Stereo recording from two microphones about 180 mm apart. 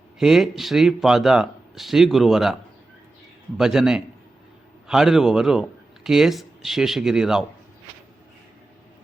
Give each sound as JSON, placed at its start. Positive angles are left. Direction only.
{"t": 0.2, "sound": "speech", "side_deg": 0}
{"t": 3.6, "sound": "speech", "side_deg": -5}